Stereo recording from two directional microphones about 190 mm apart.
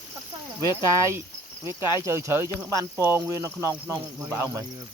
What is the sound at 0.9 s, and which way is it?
Speech, 15° right (ahead or behind).